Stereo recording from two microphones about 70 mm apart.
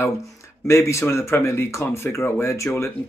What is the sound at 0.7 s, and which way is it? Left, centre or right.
Speech, left.